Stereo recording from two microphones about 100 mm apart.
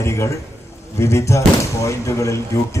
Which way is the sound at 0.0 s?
30° left (ahead or behind).